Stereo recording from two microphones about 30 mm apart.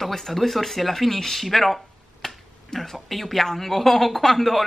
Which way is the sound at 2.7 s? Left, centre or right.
Centre.